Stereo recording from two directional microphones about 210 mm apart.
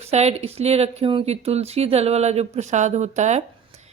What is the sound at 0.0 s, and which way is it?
Speech, 30° right (ahead or behind).